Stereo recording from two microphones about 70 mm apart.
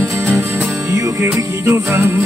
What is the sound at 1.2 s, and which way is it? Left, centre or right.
Music, right.